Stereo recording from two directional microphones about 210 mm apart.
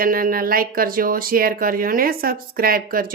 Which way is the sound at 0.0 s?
45° right (ahead or behind).